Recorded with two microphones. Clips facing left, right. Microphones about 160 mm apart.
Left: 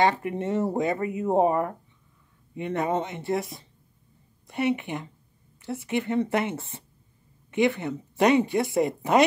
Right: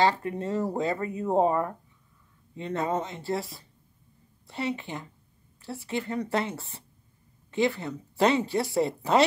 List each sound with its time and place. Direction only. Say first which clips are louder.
0.0 s speech: left 1 dB; 20° left (ahead or behind)